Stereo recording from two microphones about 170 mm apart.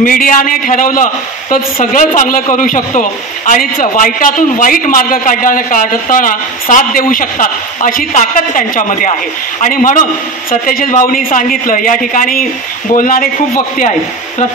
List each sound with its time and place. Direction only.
0.0 s a man's voice: 55° left (ahead or behind)